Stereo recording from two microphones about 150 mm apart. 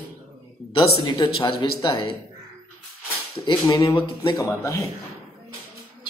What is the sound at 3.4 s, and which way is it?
Speech, 30° left (ahead or behind).